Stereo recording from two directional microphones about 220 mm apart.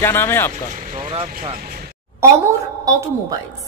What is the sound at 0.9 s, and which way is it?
Speech, 25° right (ahead or behind).